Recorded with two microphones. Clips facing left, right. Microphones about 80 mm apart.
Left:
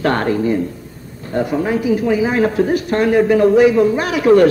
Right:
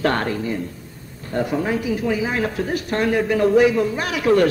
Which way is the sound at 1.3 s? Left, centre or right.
Centre.